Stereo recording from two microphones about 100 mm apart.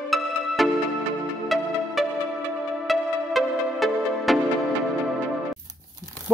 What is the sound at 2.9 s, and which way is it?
Music, centre (ahead or behind).